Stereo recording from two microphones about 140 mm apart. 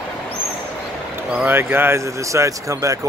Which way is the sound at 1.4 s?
15° right (ahead or behind).